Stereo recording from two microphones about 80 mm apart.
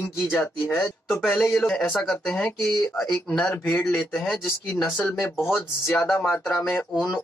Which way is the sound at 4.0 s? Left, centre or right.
Centre.